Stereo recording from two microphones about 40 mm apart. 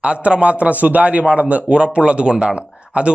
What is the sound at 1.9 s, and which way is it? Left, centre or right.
Speech, right.